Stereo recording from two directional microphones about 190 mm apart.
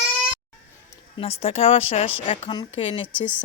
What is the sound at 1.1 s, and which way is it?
Speech, 30° left (ahead or behind).